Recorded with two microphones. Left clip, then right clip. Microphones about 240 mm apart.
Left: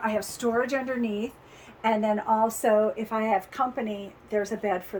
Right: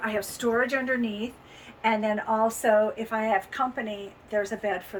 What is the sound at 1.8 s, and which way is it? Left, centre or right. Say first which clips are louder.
A woman's voice: left 1 dB; left.